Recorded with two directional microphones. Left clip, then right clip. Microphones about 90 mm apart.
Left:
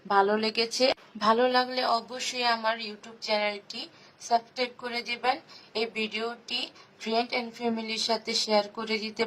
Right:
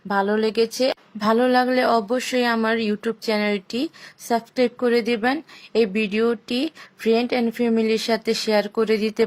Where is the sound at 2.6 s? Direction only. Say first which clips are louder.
Right 7 dB; 35° right (ahead or behind).